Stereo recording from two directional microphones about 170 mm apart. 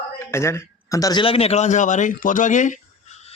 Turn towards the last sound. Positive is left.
turn(degrees=40)  # may be behind; listen again after turning